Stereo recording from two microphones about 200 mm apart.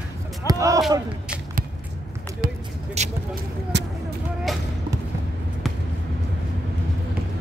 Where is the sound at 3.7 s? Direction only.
60° right (ahead or behind).